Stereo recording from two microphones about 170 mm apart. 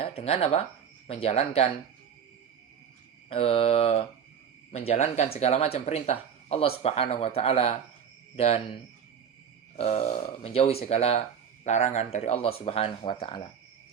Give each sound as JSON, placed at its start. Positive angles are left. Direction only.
{"t": 0.0, "sound": "speech", "side_deg": 35}
{"t": 3.2, "sound": "speech", "side_deg": 35}